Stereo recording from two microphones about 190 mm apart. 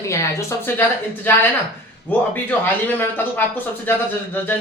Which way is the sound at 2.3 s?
10° left (ahead or behind).